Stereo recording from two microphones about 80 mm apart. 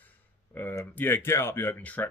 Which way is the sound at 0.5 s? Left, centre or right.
Left.